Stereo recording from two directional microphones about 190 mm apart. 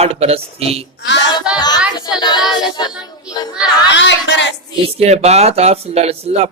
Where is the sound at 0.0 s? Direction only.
35° right (ahead or behind).